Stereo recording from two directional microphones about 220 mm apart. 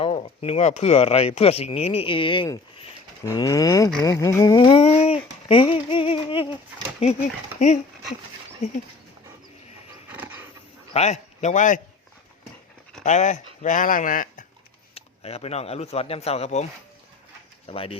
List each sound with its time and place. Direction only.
0.0 s speech: 25° left (ahead or behind)
8.6 s speech: 30° left (ahead or behind)
10.1 s wild animals: 10° right (ahead or behind)
10.9 s a man's voice: 30° left (ahead or behind)
13.1 s speech: 35° left (ahead or behind)
14.9 s speech: 25° left (ahead or behind)
17.7 s speech: 25° left (ahead or behind)